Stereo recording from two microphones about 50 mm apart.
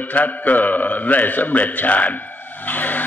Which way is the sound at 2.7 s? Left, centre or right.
Left.